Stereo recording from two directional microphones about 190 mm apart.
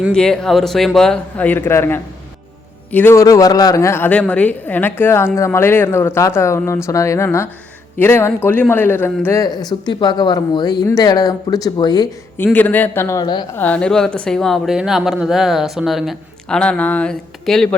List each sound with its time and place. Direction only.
0.1 s a woman's voice: 5° left (ahead or behind); by 12.0 s 20° left (ahead or behind)
12.5 s a woman's voice: 10° left (ahead or behind)
13.6 s speech: 5° left (ahead or behind)